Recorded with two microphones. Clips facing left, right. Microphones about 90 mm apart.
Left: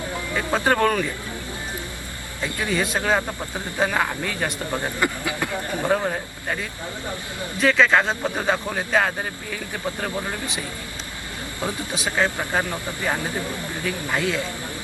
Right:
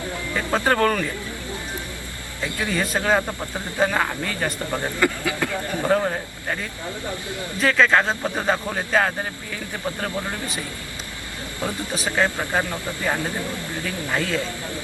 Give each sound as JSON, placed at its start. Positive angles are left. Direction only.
{"t": 0.3, "sound": "speech", "side_deg": 10}
{"t": 2.6, "sound": "a man's voice", "side_deg": 5}
{"t": 4.8, "sound": "speech", "side_deg": 20}
{"t": 5.9, "sound": "a man's voice", "side_deg": 0}
{"t": 12.0, "sound": "speech", "side_deg": 15}